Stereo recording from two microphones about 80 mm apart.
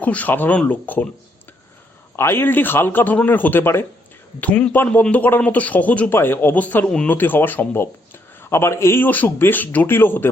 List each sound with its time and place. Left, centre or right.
0.0 s speech: centre
2.1 s speech: left
4.4 s speech: centre